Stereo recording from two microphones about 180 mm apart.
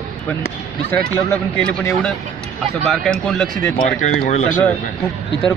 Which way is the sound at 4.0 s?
40° left (ahead or behind).